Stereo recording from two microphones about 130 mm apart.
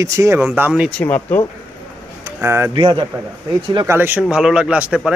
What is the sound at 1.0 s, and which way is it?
Speech, 15° left (ahead or behind).